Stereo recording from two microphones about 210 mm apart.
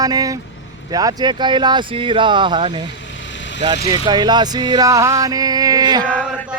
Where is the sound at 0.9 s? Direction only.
20° right (ahead or behind).